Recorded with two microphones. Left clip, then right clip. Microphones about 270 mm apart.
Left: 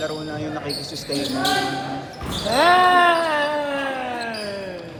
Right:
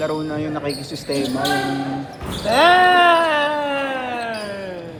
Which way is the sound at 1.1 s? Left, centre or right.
Centre.